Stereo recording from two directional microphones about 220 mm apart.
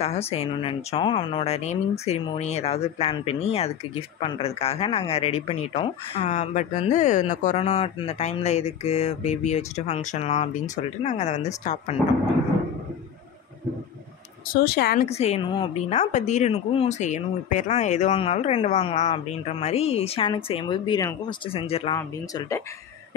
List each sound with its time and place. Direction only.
0.0 s speech: 30° left (ahead or behind)
14.5 s speech: 45° left (ahead or behind)
15.0 s speech: 30° left (ahead or behind)